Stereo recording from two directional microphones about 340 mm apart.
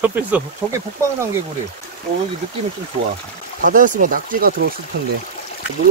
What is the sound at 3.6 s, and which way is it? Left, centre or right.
Speech, right.